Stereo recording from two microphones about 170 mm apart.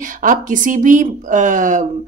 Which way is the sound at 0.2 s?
50° right (ahead or behind).